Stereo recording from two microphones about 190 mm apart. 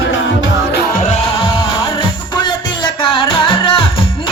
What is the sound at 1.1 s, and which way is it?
Music, 30° left (ahead or behind).